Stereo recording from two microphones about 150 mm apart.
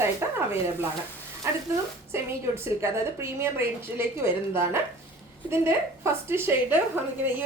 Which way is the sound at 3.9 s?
15° right (ahead or behind).